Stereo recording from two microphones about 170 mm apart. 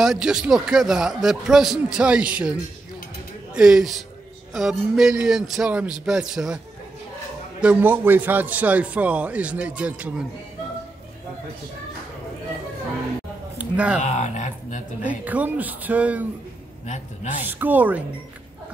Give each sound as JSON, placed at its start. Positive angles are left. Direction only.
{"t": 0.0, "sound": "a man's voice", "side_deg": -5}
{"t": 3.5, "sound": "a man's voice", "side_deg": -5}
{"t": 7.6, "sound": "a man's voice", "side_deg": -10}
{"t": 13.6, "sound": "a sound", "side_deg": -10}
{"t": 14.0, "sound": "speech", "side_deg": 45}
{"t": 15.0, "sound": "a man's voice", "side_deg": -10}
{"t": 16.8, "sound": "speech", "side_deg": 45}
{"t": 17.4, "sound": "a man's voice", "side_deg": -10}